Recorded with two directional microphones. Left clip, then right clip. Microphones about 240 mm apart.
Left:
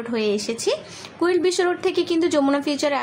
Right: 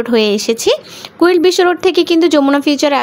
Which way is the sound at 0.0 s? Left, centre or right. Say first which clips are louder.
Right 11 dB; right.